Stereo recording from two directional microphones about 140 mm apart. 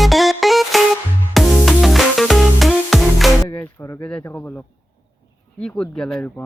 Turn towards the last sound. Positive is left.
turn(degrees=5)  # may be behind; listen again after turning